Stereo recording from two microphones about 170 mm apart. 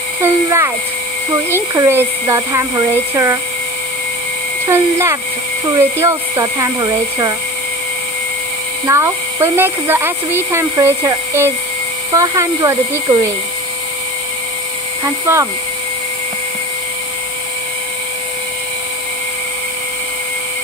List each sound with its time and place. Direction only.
0.2 s speech: 15° right (ahead or behind)
4.6 s speech: 15° right (ahead or behind)
8.8 s speech: 15° right (ahead or behind)
15.0 s speech: 15° right (ahead or behind)